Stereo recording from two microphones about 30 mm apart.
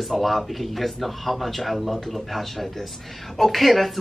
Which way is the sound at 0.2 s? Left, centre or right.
Centre.